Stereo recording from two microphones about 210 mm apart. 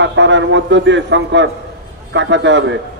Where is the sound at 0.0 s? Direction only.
60° right (ahead or behind).